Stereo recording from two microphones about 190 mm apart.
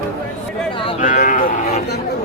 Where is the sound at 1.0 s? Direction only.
40° left (ahead or behind).